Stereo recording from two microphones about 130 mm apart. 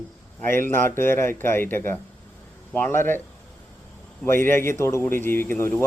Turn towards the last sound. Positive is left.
turn(degrees=15)  # may be behind; listen again after turning